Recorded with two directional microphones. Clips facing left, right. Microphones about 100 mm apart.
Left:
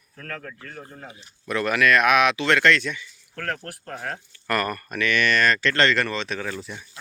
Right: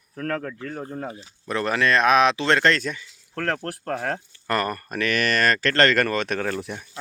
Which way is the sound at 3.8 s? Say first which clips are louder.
Right 7 dB; 55° right (ahead or behind).